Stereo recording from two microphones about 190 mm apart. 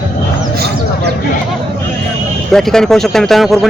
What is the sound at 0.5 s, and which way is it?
Speech, 60° right (ahead or behind).